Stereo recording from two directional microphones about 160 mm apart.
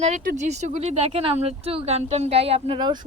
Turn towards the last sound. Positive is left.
turn(degrees=-30)  # may be behind; listen again after turning